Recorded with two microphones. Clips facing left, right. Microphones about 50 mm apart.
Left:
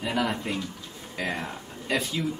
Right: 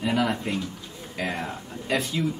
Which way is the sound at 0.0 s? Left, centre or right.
Centre.